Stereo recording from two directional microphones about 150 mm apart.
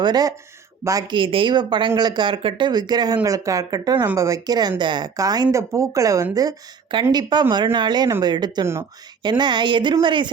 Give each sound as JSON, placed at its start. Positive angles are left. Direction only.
{"t": 0.0, "sound": "speech", "side_deg": -25}